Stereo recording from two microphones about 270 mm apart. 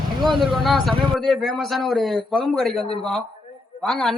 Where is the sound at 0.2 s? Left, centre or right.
Centre.